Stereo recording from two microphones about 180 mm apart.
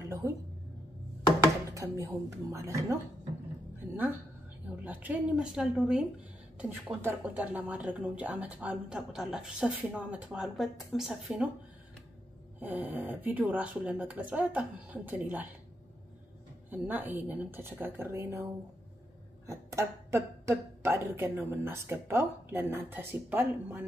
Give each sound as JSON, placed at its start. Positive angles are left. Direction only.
{"t": 0.0, "sound": "a sound", "side_deg": -20}
{"t": 1.7, "sound": "speech", "side_deg": -15}
{"t": 3.8, "sound": "a sound", "side_deg": -10}
{"t": 4.8, "sound": "speech", "side_deg": -10}
{"t": 12.5, "sound": "speech", "side_deg": -10}
{"t": 16.7, "sound": "speech", "side_deg": -10}